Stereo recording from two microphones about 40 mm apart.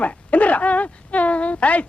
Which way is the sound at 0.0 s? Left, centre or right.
Left.